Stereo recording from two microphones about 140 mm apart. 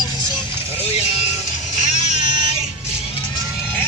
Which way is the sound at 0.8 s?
50° left (ahead or behind).